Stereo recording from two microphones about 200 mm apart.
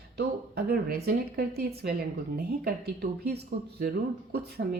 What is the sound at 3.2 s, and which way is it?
A woman's voice, 55° right (ahead or behind).